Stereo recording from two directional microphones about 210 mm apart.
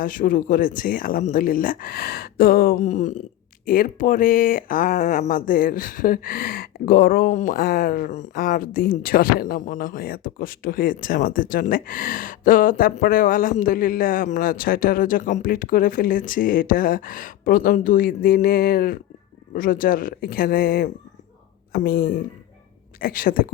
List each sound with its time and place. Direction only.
0.0 s speech: 40° left (ahead or behind)